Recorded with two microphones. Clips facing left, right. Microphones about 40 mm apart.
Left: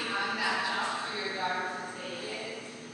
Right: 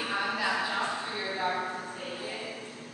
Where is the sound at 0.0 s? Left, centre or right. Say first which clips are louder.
Right 1 dB; centre.